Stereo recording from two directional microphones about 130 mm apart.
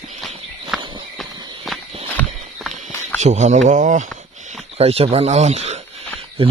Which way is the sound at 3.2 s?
65° right (ahead or behind).